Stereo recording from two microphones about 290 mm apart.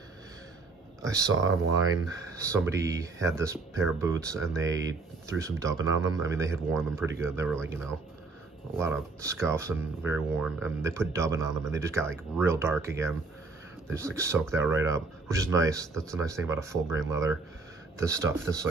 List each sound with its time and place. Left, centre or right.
1.0 s speech: centre
1.3 s speech: right
2.0 s speech: centre
8.7 s speech: centre
13.8 s speech: centre